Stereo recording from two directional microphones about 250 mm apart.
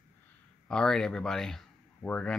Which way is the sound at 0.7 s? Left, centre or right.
Centre.